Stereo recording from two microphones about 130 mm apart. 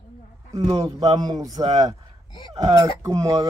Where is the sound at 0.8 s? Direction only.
30° right (ahead or behind).